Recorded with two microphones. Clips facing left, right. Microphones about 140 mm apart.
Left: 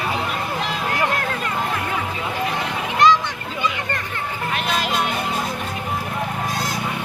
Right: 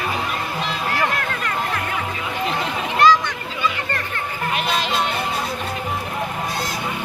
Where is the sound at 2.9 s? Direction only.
20° left (ahead or behind).